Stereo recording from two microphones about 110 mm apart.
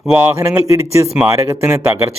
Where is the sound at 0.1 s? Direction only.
15° right (ahead or behind).